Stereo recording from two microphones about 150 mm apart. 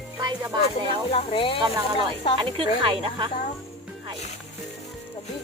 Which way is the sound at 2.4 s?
35° right (ahead or behind).